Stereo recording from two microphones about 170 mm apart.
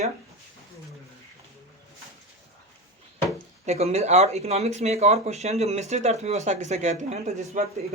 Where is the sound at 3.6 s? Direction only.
40° right (ahead or behind).